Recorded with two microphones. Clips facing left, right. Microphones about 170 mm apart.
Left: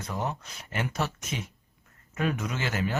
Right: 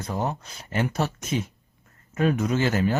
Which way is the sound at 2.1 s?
35° right (ahead or behind).